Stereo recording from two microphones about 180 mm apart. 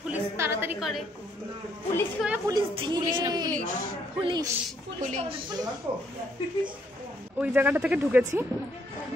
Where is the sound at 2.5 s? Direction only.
25° right (ahead or behind).